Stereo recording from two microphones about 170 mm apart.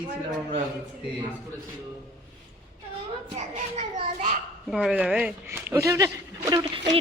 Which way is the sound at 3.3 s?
35° right (ahead or behind).